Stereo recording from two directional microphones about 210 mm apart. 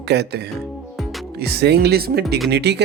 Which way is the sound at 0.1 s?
50° right (ahead or behind).